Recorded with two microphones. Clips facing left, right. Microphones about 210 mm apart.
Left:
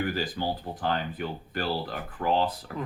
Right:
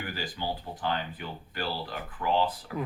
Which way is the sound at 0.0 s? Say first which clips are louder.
Left 6 dB; 45° left (ahead or behind).